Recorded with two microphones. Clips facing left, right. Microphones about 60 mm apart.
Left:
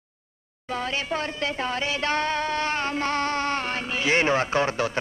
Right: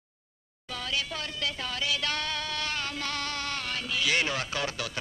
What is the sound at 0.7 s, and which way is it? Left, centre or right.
Speech, left.